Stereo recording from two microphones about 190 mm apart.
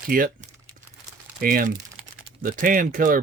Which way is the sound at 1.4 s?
50° right (ahead or behind).